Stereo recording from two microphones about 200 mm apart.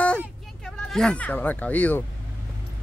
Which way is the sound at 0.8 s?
5° left (ahead or behind).